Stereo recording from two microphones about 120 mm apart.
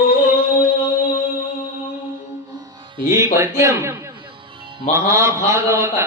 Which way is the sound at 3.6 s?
25° right (ahead or behind).